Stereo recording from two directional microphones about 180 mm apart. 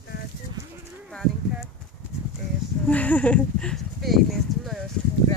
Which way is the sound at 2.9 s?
10° left (ahead or behind).